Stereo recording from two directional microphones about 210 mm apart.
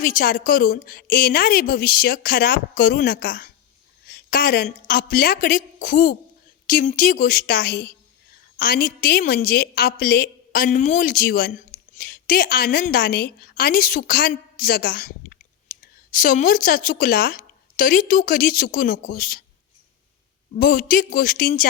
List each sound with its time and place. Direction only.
0.0 s a woman's voice: 40° left (ahead or behind)
20.6 s a woman's voice: 40° left (ahead or behind)